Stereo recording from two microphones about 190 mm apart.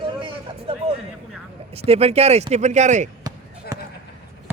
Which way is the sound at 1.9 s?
30° right (ahead or behind).